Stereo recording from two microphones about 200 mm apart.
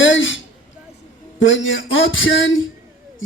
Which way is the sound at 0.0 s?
70° left (ahead or behind).